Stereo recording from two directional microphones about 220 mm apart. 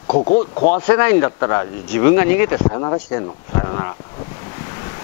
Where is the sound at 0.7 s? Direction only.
15° left (ahead or behind).